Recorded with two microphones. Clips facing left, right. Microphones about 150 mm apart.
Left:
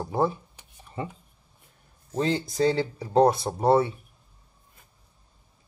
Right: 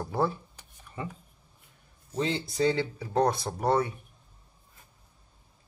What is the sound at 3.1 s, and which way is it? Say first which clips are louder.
Speech: left 6 dB; 25° left (ahead or behind).